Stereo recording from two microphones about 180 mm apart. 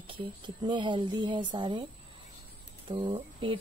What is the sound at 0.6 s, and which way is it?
A woman's voice, 25° right (ahead or behind).